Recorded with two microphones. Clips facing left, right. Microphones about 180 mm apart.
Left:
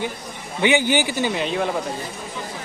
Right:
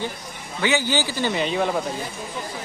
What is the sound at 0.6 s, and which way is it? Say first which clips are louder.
Speech: left 4 dB; 20° left (ahead or behind).